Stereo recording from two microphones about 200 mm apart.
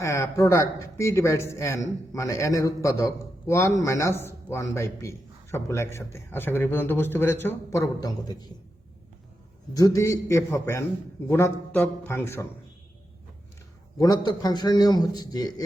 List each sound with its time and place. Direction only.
0.0 s a man's voice: 15° left (ahead or behind)
9.7 s a man's voice: 15° left (ahead or behind)
14.3 s speech: 20° left (ahead or behind)